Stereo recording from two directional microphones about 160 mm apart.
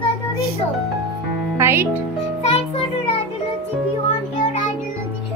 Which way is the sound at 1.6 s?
15° right (ahead or behind).